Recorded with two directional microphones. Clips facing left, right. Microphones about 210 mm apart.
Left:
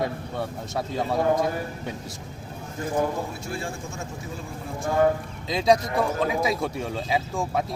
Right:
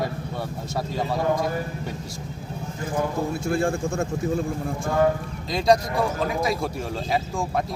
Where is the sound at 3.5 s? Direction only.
50° right (ahead or behind).